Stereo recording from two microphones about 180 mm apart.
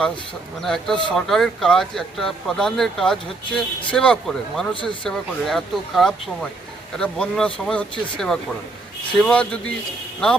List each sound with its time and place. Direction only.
0.6 s speech: centre (ahead or behind)
4.7 s speech: 25° left (ahead or behind)
5.0 s speech: centre (ahead or behind)